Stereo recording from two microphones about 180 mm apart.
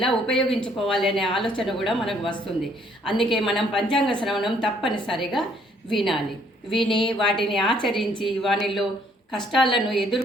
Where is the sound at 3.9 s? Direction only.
25° left (ahead or behind).